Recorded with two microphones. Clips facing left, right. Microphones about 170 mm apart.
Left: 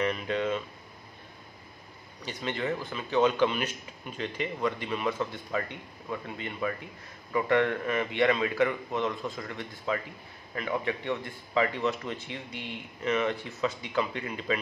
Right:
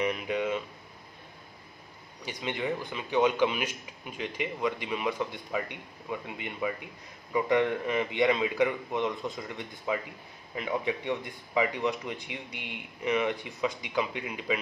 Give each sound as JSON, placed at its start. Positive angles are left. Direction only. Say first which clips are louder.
{"t": 0.0, "sound": "a man's voice", "louder": "even", "side_deg": -10}
{"t": 2.2, "sound": "a man's voice", "louder": "left 1 dB", "side_deg": -15}